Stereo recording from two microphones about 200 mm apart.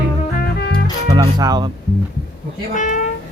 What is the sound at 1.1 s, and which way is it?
Music, 20° right (ahead or behind).